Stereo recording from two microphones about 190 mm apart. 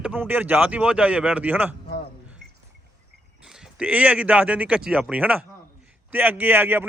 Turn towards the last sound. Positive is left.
turn(degrees=-10)  # may be behind; listen again after turning